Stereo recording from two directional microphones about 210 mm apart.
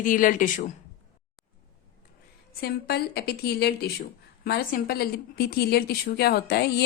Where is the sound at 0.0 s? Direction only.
40° left (ahead or behind).